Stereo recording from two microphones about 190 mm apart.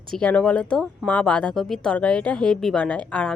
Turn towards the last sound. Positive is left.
turn(degrees=5)  # may be behind; listen again after turning